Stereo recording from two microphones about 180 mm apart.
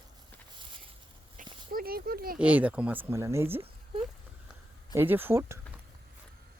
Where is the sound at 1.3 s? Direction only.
55° right (ahead or behind).